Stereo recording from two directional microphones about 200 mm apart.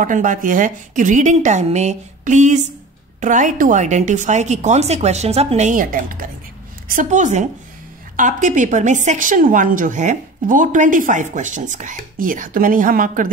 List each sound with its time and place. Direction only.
0.0 s a woman's voice: 40° right (ahead or behind)